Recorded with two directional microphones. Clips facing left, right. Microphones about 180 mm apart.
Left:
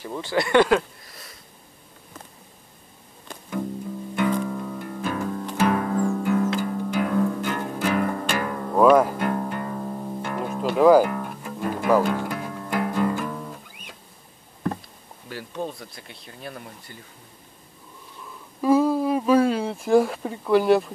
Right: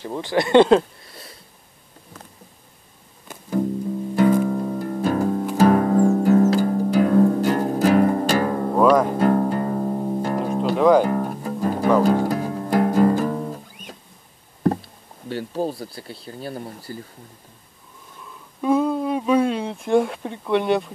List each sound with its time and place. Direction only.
0.0 s speech: 20° right (ahead or behind)
4.1 s music: 40° right (ahead or behind)
10.8 s music: 5° left (ahead or behind)
11.1 s music: 35° right (ahead or behind)
14.6 s speech: 35° right (ahead or behind)
18.6 s a sound: 5° left (ahead or behind)